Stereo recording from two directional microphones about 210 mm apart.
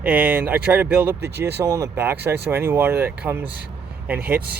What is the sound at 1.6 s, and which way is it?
Speech, 15° right (ahead or behind).